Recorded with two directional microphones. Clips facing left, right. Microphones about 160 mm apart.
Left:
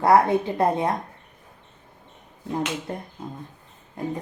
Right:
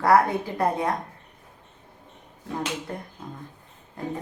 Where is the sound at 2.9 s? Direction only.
25° left (ahead or behind).